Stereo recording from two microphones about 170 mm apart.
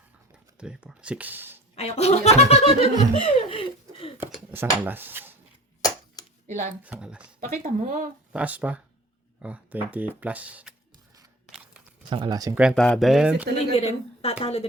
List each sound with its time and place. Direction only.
0.6 s speech: 5° right (ahead or behind)
1.7 s speech: 40° left (ahead or behind)
3.5 s laughter: 35° left (ahead or behind)
4.2 s speech: 10° right (ahead or behind)
5.8 s a sound: 20° left (ahead or behind)
6.8 s speech: 5° right (ahead or behind)
7.4 s speech: 50° right (ahead or behind)
8.3 s speech: 10° right (ahead or behind)
11.4 s a sound: 5° right (ahead or behind)
12.0 s speech: 25° right (ahead or behind)
12.5 s speech: centre (ahead or behind)
13.7 s speech: 35° left (ahead or behind)